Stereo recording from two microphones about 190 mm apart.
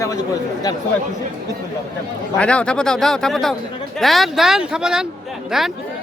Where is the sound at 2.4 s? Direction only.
5° left (ahead or behind).